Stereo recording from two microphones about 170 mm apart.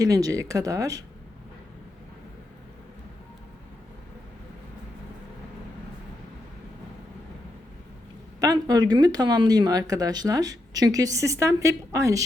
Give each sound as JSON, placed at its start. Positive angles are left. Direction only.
{"t": 0.0, "sound": "speech", "side_deg": -20}
{"t": 8.4, "sound": "speech", "side_deg": -20}